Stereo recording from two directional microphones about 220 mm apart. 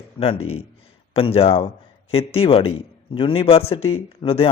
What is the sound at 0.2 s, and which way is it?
A man's voice, 25° left (ahead or behind).